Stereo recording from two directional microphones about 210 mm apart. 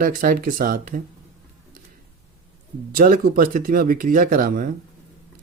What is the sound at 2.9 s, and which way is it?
Speech, 40° right (ahead or behind).